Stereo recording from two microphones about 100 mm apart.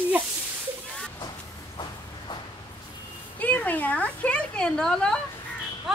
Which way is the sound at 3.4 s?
15° left (ahead or behind).